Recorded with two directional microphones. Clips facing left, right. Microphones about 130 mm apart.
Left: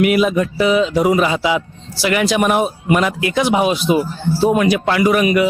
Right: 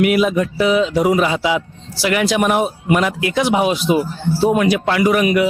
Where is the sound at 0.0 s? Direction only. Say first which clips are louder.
Left 1 dB; 20° left (ahead or behind).